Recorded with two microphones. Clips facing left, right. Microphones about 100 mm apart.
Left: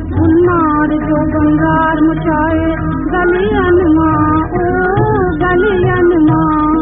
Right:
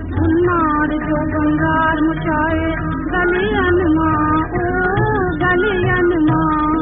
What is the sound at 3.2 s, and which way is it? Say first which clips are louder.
Child singing: left 4 dB; 15° left (ahead or behind).